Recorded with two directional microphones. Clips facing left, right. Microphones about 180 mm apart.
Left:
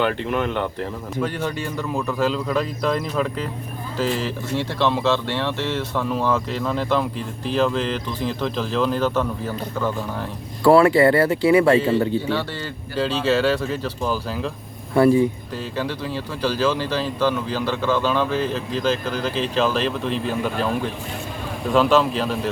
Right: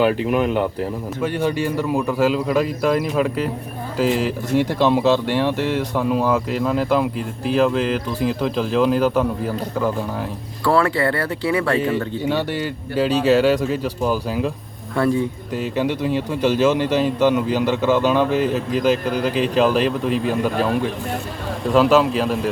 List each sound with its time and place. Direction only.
0.0 s a man's voice: 10° right (ahead or behind)
10.6 s speech: 15° left (ahead or behind)
12.2 s a man's voice: 15° right (ahead or behind)
14.9 s speech: 10° left (ahead or behind)
15.5 s a man's voice: 15° right (ahead or behind)
21.7 s a man's voice: 5° right (ahead or behind)